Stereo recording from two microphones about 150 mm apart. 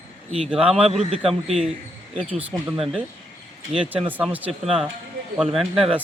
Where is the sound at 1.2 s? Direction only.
Centre (ahead or behind).